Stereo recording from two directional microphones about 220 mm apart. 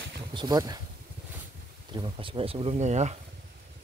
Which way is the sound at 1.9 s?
20° right (ahead or behind).